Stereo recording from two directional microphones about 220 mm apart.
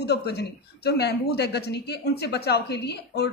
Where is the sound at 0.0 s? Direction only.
50° left (ahead or behind).